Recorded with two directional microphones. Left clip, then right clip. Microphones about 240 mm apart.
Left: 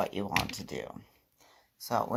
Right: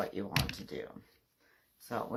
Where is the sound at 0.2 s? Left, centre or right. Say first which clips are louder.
Left 4 dB; left.